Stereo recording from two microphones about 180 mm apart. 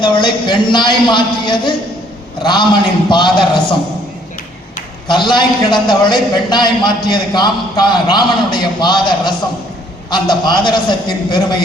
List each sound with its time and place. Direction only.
0.0 s a man's voice: 25° left (ahead or behind)
5.0 s a man's voice: 25° left (ahead or behind)